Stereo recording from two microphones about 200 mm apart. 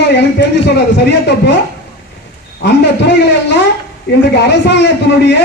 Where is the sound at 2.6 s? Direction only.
55° left (ahead or behind).